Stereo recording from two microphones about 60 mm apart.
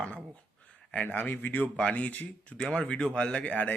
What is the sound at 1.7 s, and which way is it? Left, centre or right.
A man's voice, centre.